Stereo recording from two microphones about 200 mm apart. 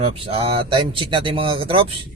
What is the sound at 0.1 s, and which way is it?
Speech, 30° right (ahead or behind).